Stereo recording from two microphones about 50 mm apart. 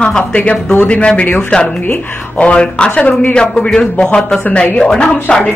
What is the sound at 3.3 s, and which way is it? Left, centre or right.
Speech, centre.